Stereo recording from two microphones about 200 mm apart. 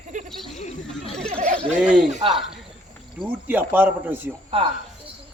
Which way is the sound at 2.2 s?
25° right (ahead or behind).